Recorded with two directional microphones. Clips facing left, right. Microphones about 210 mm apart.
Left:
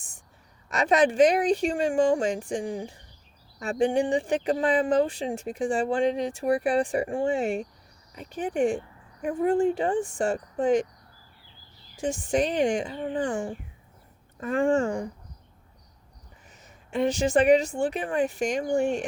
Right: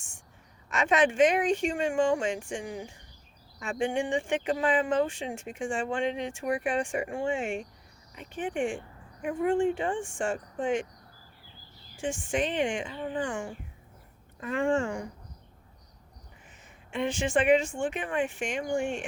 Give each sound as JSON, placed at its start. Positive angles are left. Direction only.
{"t": 0.7, "sound": "speech", "side_deg": 35}
{"t": 11.9, "sound": "speech", "side_deg": 40}
{"t": 16.6, "sound": "speech", "side_deg": 40}